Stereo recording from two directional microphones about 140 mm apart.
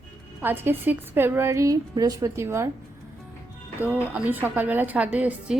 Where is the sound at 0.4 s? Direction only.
15° right (ahead or behind).